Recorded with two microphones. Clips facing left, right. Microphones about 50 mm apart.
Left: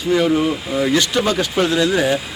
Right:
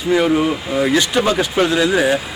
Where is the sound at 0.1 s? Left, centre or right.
Right.